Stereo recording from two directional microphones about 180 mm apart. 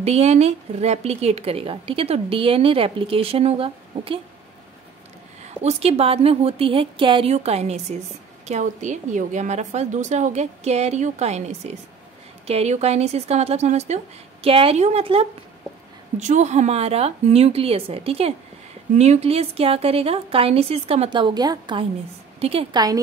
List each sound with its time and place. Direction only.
0.0 s a woman's voice: 35° right (ahead or behind)
5.6 s a woman's voice: 35° right (ahead or behind)